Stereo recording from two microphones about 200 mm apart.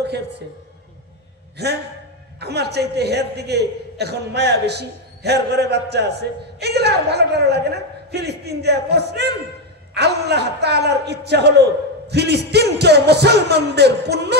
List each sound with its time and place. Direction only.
1.6 s a man's voice: 55° right (ahead or behind)